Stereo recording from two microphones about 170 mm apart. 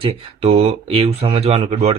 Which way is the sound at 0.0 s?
35° right (ahead or behind).